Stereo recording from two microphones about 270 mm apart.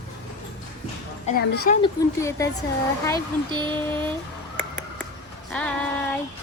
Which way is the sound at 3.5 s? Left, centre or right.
Centre.